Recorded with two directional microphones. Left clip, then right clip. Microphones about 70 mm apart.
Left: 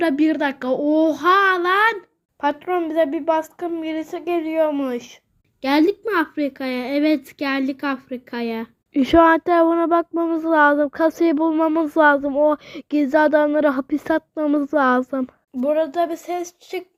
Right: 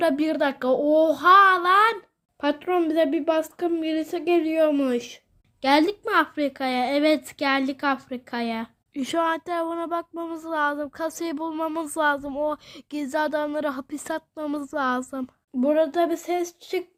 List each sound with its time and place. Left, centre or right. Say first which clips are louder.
0.0 s a child's voice: left 3 dB; centre
2.6 s a woman's voice: even; right
8.9 s speech: left 11 dB; centre
11.5 s speech: left 9 dB; right
11.9 s a child's voice: left 8 dB; centre